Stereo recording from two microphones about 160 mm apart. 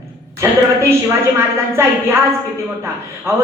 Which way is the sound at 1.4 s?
15° right (ahead or behind).